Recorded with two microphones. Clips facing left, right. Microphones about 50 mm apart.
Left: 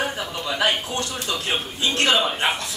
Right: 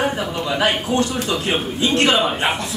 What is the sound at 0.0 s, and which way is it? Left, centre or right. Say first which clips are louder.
Speech: right 5 dB; centre.